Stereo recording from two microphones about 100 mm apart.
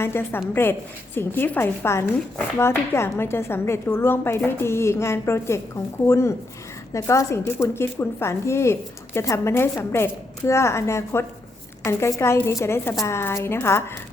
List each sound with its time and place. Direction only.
0.0 s speech: 25° left (ahead or behind)